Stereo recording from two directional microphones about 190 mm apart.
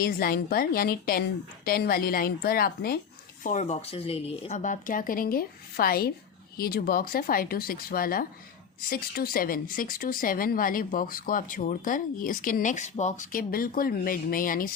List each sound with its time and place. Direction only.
0.0 s speech: 50° left (ahead or behind)
3.4 s speech: 40° left (ahead or behind)